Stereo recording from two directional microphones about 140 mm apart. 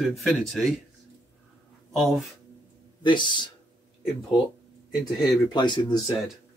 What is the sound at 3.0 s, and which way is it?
Speech, 35° left (ahead or behind).